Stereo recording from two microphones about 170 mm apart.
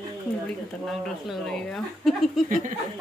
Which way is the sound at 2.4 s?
50° right (ahead or behind).